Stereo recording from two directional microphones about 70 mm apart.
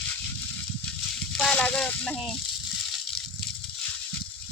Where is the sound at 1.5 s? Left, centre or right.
Centre.